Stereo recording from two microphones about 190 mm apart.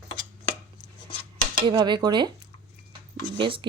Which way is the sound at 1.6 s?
25° right (ahead or behind).